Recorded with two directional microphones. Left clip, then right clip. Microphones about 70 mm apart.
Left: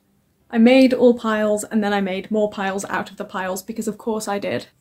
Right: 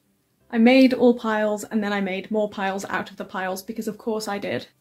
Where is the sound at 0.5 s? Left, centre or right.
Centre.